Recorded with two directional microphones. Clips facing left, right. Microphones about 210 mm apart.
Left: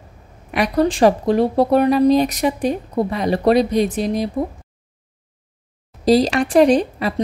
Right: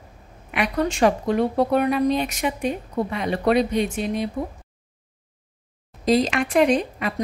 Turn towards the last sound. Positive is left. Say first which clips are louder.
# left 5 dB
turn(degrees=35)  # may be behind; listen again after turning